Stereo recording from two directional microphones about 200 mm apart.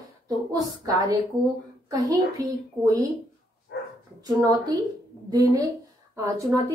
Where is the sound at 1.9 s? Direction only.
20° right (ahead or behind).